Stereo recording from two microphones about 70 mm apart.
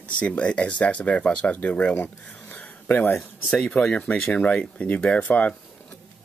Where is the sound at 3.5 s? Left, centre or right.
Centre.